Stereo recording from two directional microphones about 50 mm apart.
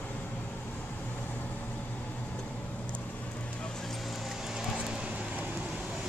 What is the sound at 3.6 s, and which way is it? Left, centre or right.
Vehicle, centre.